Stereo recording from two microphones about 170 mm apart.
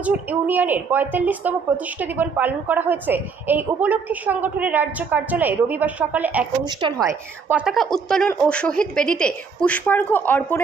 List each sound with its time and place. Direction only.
0.0 s a woman's voice: 10° right (ahead or behind)
6.7 s a woman's voice: 25° right (ahead or behind)
7.6 s a woman's voice: centre (ahead or behind)